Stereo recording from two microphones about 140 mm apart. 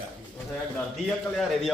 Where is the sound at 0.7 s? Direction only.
5° left (ahead or behind).